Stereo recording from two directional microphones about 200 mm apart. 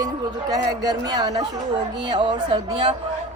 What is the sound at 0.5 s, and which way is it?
A woman's voice, 20° right (ahead or behind).